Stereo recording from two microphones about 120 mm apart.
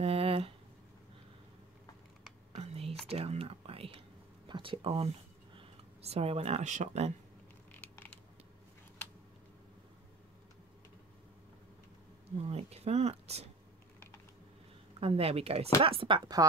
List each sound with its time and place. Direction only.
0.0 s a sound: 55° right (ahead or behind)
2.5 s whispering: 60° right (ahead or behind)
3.1 s speech: 55° right (ahead or behind)
7.7 s a sound: 15° left (ahead or behind)
12.4 s speech: 60° right (ahead or behind)
15.0 s speech: 55° right (ahead or behind)